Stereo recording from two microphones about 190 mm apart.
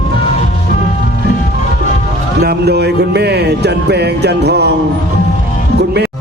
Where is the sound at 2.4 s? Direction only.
60° right (ahead or behind).